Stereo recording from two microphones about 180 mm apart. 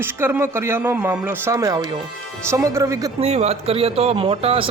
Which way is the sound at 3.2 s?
35° right (ahead or behind).